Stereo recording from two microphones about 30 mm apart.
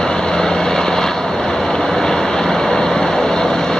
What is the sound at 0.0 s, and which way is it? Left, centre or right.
Vehicle, left.